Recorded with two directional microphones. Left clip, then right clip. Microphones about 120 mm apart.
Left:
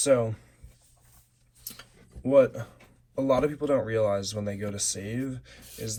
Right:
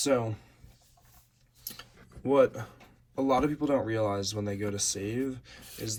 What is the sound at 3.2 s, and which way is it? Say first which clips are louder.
Speech: left 2 dB; 50° right (ahead or behind).